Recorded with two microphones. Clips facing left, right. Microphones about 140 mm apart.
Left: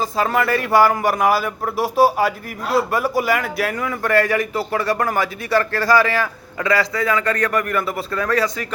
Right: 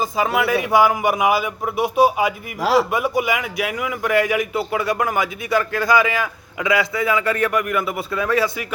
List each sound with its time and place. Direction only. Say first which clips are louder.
0.0 s a man's voice: even; 5° right (ahead or behind)
2.6 s a man's voice: right 3 dB; 90° right
2.9 s a man's voice: left 1 dB; centre (ahead or behind)